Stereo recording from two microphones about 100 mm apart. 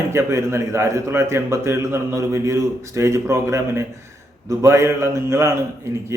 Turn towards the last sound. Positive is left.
turn(degrees=-30)  # may be behind; listen again after turning